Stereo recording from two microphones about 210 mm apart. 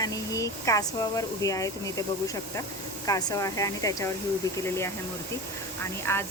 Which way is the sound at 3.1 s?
15° left (ahead or behind).